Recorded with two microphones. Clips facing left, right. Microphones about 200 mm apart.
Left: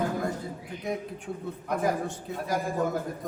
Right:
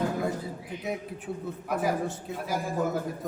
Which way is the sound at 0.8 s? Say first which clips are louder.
Left 2 dB; 5° right (ahead or behind).